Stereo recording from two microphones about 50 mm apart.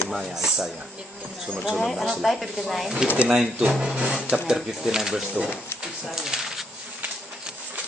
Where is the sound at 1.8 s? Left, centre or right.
Centre.